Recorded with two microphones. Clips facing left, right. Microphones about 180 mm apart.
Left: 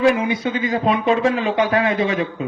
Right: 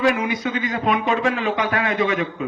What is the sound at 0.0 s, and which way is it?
Speech, 30° left (ahead or behind).